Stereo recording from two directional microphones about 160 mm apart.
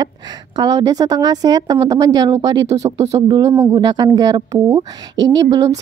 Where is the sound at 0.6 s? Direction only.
20° right (ahead or behind).